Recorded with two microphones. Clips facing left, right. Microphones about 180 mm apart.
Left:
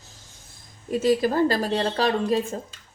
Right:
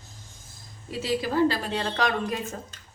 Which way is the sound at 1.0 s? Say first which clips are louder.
Left 3 dB; 45° left (ahead or behind).